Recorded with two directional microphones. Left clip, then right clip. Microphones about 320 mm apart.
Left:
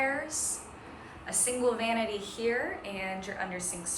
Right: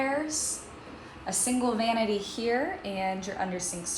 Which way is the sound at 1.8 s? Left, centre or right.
Centre.